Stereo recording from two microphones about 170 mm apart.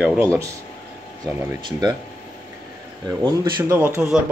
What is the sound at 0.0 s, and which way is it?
Speech, 10° right (ahead or behind).